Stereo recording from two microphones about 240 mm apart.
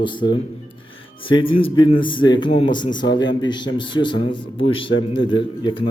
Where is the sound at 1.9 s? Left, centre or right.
Centre.